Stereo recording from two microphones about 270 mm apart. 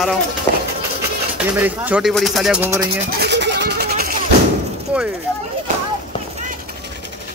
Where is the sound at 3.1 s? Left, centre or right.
Right.